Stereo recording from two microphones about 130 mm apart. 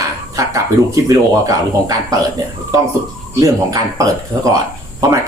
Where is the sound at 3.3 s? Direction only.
25° right (ahead or behind).